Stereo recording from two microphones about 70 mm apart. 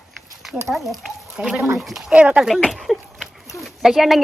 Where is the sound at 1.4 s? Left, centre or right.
Right.